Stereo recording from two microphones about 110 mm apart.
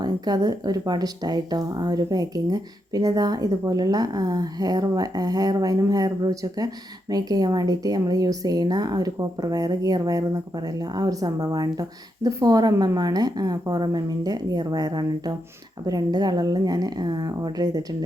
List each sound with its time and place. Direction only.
0.0 s a woman's voice: 40° right (ahead or behind)